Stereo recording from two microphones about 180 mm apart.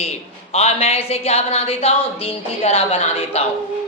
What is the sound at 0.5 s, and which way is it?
A woman's voice, 35° left (ahead or behind).